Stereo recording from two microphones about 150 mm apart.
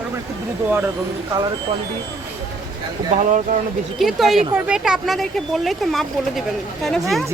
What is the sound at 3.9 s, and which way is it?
Speech, centre (ahead or behind).